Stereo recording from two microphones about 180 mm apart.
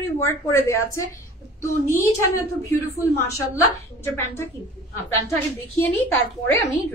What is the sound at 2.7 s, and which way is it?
Speech, 15° left (ahead or behind).